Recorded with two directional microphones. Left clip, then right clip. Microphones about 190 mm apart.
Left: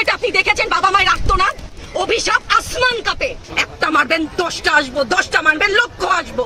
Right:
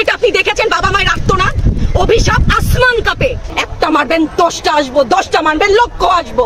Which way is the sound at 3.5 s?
5° right (ahead or behind).